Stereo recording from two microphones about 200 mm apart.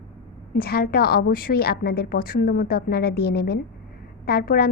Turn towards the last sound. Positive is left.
turn(degrees=50)  # may be behind; listen again after turning